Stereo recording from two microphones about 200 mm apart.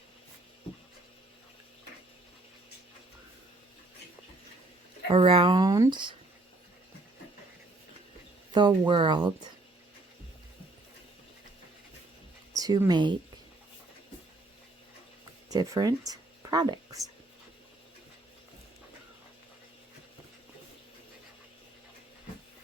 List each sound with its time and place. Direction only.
5.0 s speech: 25° right (ahead or behind)
8.5 s speech: 25° right (ahead or behind)
12.5 s speech: 20° right (ahead or behind)
15.4 s speech: 15° right (ahead or behind)